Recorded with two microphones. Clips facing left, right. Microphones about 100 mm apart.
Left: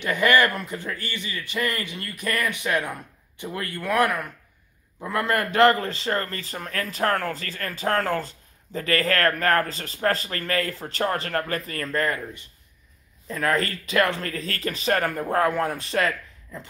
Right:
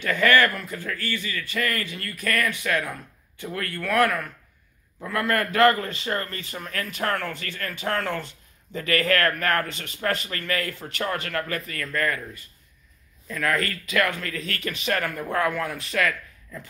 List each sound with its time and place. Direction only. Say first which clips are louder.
0.0 s a man's voice: even; 15° left (ahead or behind)